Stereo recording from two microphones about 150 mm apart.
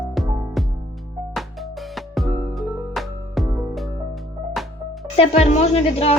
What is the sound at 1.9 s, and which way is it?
Music, centre (ahead or behind).